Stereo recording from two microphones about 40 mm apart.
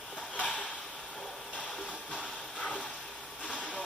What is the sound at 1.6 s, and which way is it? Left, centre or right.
Music, left.